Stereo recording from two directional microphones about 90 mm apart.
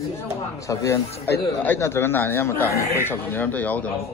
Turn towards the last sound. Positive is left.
turn(degrees=20)  # may be behind; listen again after turning